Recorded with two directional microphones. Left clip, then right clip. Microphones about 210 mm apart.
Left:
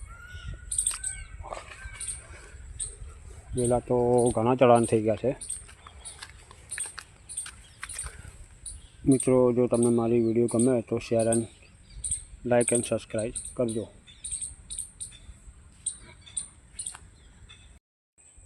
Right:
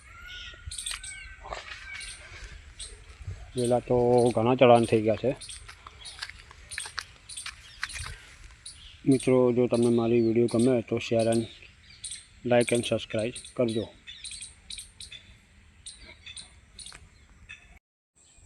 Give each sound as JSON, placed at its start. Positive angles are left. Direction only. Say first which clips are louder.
{"t": 3.6, "sound": "speech", "louder": "right 1 dB", "side_deg": 5}
{"t": 6.7, "sound": "a sound", "louder": "right 4 dB", "side_deg": 0}
{"t": 9.0, "sound": "speech", "louder": "left 1 dB", "side_deg": 0}
{"t": 14.2, "sound": "cricket", "louder": "left 5 dB", "side_deg": 60}